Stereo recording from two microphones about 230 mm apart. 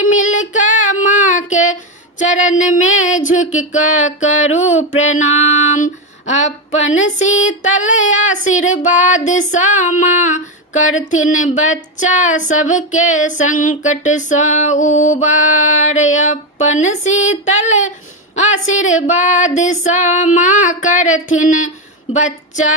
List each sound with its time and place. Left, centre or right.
0.2 s female singing: left
4.5 s a sound: left
6.8 s female singing: left
22.1 s speech: left